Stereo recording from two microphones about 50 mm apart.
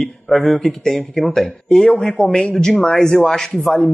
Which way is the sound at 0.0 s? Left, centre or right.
Centre.